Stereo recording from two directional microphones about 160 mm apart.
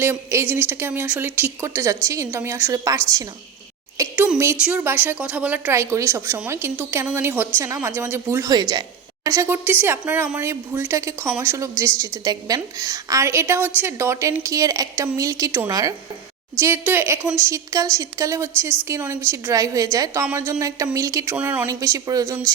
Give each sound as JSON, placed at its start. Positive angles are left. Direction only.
{"t": 0.0, "sound": "a woman's voice", "side_deg": -15}
{"t": 4.1, "sound": "a sound", "side_deg": -10}
{"t": 4.6, "sound": "a woman's voice", "side_deg": -10}
{"t": 21.7, "sound": "a woman's voice", "side_deg": -20}